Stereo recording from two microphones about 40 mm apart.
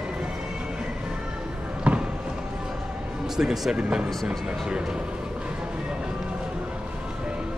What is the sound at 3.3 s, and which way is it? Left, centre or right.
Speech, centre.